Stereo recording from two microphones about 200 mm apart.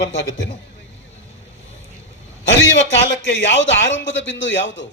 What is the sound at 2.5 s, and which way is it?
A man's voice, 65° left (ahead or behind).